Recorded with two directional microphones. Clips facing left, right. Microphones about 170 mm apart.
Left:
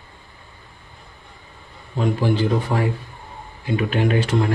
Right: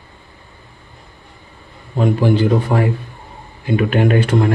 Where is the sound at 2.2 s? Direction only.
60° right (ahead or behind).